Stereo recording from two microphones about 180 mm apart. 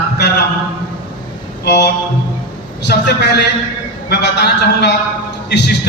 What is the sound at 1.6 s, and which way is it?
A man's voice, 70° left (ahead or behind).